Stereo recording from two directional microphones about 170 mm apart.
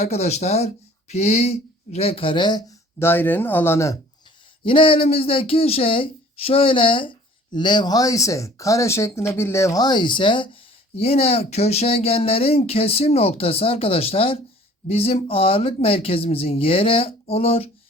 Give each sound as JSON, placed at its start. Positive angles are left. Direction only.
{"t": 0.0, "sound": "speech", "side_deg": 40}
{"t": 4.6, "sound": "speech", "side_deg": 30}